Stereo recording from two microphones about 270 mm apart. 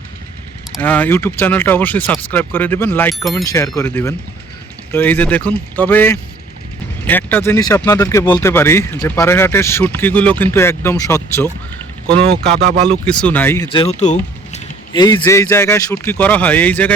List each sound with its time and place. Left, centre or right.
0.7 s speech: centre
12.1 s speech: right
13.1 s speech: centre
13.7 s speech: centre
15.0 s speech: centre